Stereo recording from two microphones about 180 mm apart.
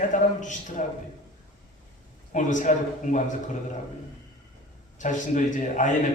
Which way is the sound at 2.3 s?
45° left (ahead or behind).